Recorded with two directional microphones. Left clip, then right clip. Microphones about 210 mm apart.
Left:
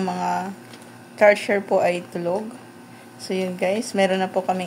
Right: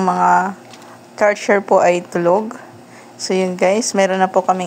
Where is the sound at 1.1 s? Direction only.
20° right (ahead or behind).